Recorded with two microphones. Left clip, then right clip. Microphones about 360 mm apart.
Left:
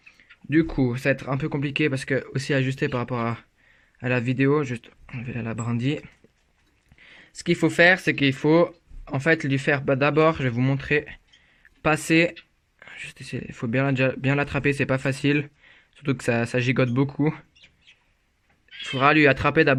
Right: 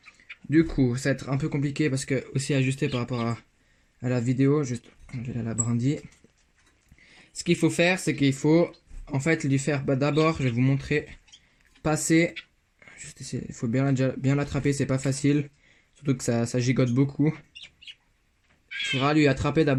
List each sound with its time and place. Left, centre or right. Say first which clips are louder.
0.1 s speech: left 1 dB; centre
18.9 s speech: left 5 dB; left